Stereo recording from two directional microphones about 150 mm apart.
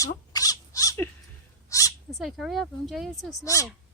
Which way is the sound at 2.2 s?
Centre (ahead or behind).